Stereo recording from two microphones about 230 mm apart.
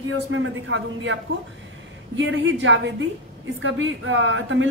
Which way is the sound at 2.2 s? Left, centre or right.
Right.